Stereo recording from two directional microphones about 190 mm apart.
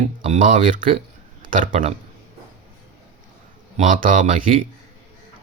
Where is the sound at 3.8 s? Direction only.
45° right (ahead or behind).